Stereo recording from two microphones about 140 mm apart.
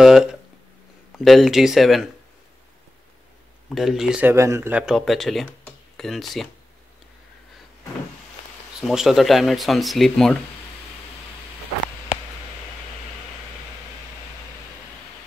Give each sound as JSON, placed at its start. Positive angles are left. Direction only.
{"t": 0.0, "sound": "speech", "side_deg": -5}
{"t": 3.7, "sound": "speech", "side_deg": 0}
{"t": 4.3, "sound": "speech", "side_deg": -20}
{"t": 4.8, "sound": "speech", "side_deg": 0}
{"t": 8.8, "sound": "speech", "side_deg": 0}